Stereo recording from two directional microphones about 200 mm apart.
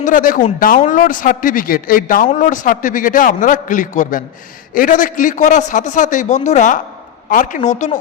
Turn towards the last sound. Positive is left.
turn(degrees=35)  # may be behind; listen again after turning